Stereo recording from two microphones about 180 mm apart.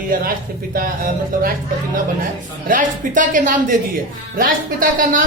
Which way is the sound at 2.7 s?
45° right (ahead or behind).